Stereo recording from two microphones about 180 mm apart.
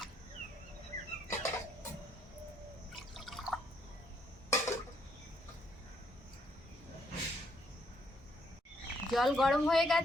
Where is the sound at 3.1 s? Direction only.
Centre (ahead or behind).